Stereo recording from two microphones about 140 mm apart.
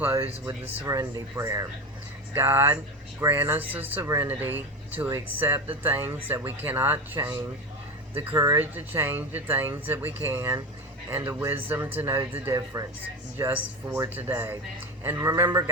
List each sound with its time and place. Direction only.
0.0 s speech: 15° right (ahead or behind)
12.7 s speech: 25° right (ahead or behind)